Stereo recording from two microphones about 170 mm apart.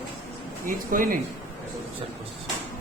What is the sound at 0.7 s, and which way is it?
Speech, 55° right (ahead or behind).